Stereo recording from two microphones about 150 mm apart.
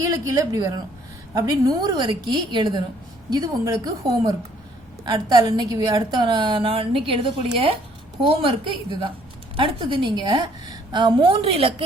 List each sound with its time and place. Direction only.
0.0 s a woman's voice: 25° right (ahead or behind)
9.6 s a woman's voice: 35° right (ahead or behind)